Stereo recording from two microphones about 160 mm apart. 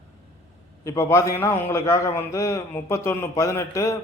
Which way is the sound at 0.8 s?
20° left (ahead or behind).